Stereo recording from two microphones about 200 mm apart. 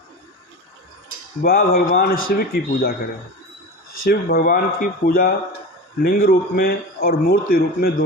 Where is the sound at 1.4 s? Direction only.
45° left (ahead or behind).